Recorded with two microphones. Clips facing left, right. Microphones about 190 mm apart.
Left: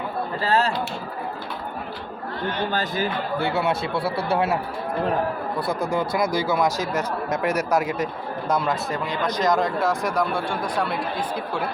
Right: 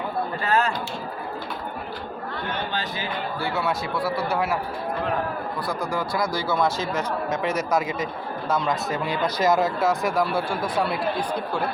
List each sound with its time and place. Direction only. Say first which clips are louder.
0.4 s speech: left 2 dB; 30° left (ahead or behind)
3.3 s speech: left 3 dB; 25° left (ahead or behind)
5.6 s speech: left 4 dB; 20° left (ahead or behind)
9.0 s speech: right 1 dB; 5° right (ahead or behind)